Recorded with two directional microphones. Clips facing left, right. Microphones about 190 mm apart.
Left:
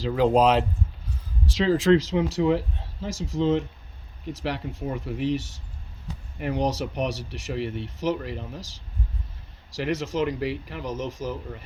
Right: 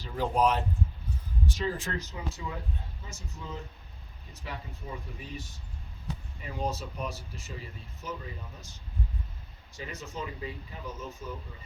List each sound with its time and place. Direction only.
0.0 s speech: 90° left
9.7 s speech: 90° left